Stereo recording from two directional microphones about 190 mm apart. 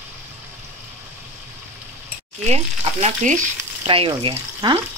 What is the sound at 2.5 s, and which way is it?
Speech, 35° right (ahead or behind).